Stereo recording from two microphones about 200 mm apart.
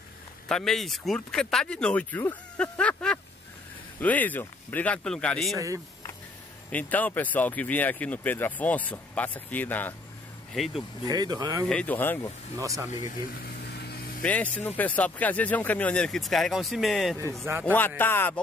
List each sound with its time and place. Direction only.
0.5 s speech: centre (ahead or behind)
6.7 s speech: 10° left (ahead or behind)
11.1 s speech: 20° right (ahead or behind)
11.7 s speech: 10° left (ahead or behind)
12.5 s speech: 15° right (ahead or behind)
13.0 s a sound: 50° left (ahead or behind)
14.2 s speech: 5° left (ahead or behind)